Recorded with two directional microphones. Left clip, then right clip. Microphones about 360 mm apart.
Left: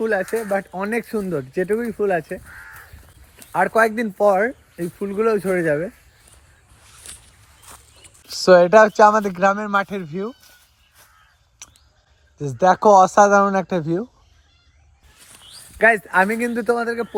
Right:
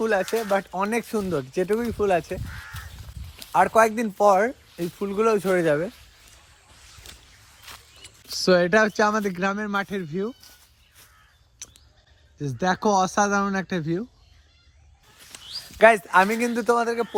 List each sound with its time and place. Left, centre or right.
0.0 s speech: centre
3.5 s speech: centre
8.3 s speech: centre
11.6 s bleat: centre
12.4 s speech: centre
15.3 s a sound: right
15.8 s speech: centre